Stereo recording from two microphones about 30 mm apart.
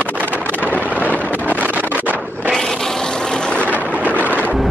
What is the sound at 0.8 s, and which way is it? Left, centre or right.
Vehicle, right.